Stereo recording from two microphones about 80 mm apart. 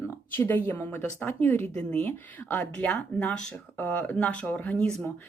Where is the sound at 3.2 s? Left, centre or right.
Centre.